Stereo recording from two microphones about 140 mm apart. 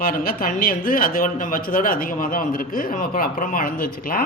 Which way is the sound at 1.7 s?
85° left.